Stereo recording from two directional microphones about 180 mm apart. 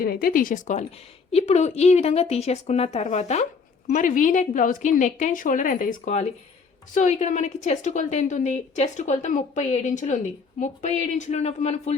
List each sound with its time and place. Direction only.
0.0 s a woman's voice: 55° left (ahead or behind); by 11.9 s 35° left (ahead or behind)